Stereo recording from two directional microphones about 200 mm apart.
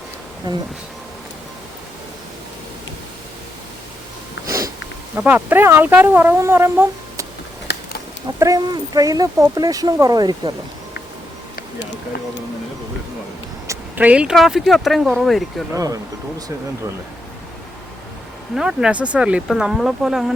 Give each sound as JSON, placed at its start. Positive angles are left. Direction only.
{"t": 4.4, "sound": "sniff", "side_deg": -15}
{"t": 5.1, "sound": "speech", "side_deg": -10}
{"t": 7.7, "sound": "a sound", "side_deg": 55}
{"t": 8.4, "sound": "speech", "side_deg": -20}
{"t": 13.7, "sound": "speech", "side_deg": -10}
{"t": 15.7, "sound": "speech", "side_deg": -15}
{"t": 18.5, "sound": "speech", "side_deg": -5}